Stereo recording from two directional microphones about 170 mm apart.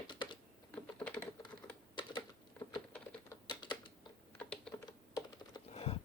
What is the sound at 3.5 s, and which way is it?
Typing, 25° left (ahead or behind).